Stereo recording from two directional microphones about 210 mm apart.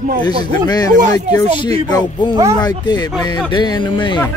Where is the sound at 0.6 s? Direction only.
20° left (ahead or behind).